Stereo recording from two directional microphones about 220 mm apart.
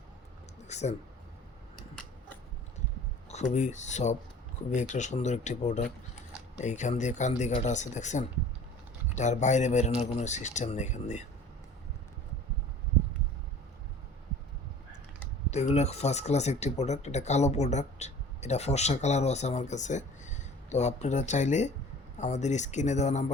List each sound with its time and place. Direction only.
0.7 s speech: 30° left (ahead or behind)
3.5 s speech: 35° left (ahead or behind)
15.4 s speech: 30° left (ahead or behind)